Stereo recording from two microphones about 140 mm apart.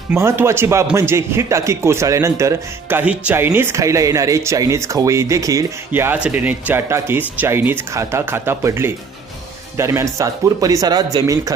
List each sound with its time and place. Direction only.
0.1 s speech: 15° right (ahead or behind)
3.0 s speech: 10° right (ahead or behind); by 11.5 s 25° right (ahead or behind)